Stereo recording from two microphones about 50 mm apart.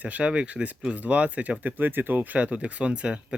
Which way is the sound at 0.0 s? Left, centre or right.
Right.